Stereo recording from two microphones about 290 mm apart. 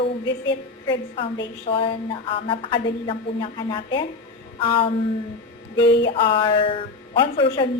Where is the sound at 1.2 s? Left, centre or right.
Centre.